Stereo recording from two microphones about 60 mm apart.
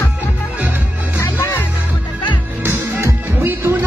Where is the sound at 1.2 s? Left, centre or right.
Left.